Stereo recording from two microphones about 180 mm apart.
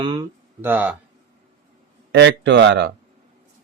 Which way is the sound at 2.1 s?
75° right (ahead or behind).